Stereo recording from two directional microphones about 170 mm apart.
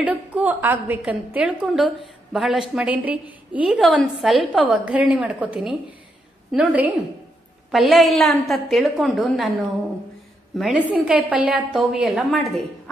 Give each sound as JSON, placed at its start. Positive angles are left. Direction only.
{"t": 0.0, "sound": "a woman's voice", "side_deg": -10}
{"t": 10.6, "sound": "a woman's voice", "side_deg": -5}